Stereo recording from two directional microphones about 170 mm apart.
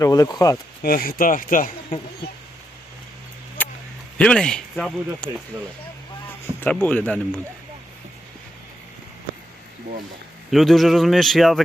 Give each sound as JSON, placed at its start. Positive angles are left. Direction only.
{"t": 0.0, "sound": "speech", "side_deg": 20}
{"t": 0.8, "sound": "speech", "side_deg": 60}
{"t": 3.6, "sound": "a sound", "side_deg": 10}
{"t": 4.2, "sound": "speech", "side_deg": 5}
{"t": 6.6, "sound": "speech", "side_deg": 5}
{"t": 10.5, "sound": "speech", "side_deg": 0}